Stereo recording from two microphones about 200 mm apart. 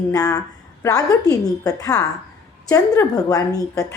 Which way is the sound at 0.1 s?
20° left (ahead or behind).